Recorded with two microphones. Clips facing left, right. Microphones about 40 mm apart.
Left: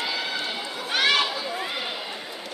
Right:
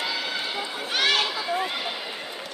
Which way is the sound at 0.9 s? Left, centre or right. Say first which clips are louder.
Left 2 dB; centre.